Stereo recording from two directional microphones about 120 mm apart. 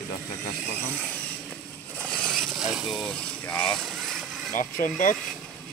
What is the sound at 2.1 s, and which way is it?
Vehicle, 5° left (ahead or behind).